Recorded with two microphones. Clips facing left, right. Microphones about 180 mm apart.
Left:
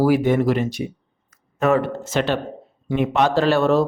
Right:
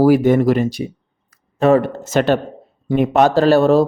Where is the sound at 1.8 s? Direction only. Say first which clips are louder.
Right 4 dB; 45° right (ahead or behind).